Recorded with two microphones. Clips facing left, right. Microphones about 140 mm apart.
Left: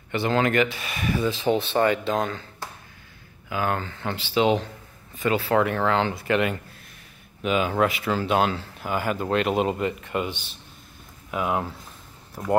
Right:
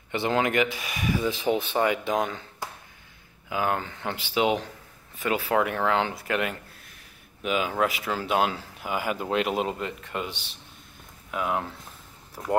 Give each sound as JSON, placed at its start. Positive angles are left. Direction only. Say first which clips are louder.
{"t": 0.1, "sound": "speech", "louder": "left 2 dB", "side_deg": -15}
{"t": 2.6, "sound": "finger snapping", "louder": "right 3 dB", "side_deg": -15}
{"t": 3.4, "sound": "speech", "louder": "left 1 dB", "side_deg": -15}